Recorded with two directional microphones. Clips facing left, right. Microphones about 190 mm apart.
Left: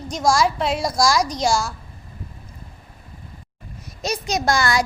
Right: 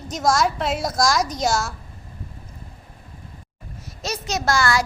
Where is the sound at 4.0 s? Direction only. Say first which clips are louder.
Left 3 dB; 15° left (ahead or behind).